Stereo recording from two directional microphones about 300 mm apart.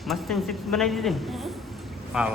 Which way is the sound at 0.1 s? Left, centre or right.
Centre.